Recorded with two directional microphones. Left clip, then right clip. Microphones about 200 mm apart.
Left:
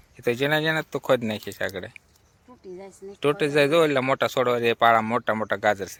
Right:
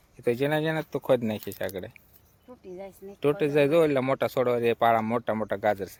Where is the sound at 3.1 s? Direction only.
Centre (ahead or behind).